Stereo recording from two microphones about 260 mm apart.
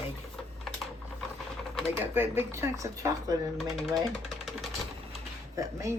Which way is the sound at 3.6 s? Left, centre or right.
Centre.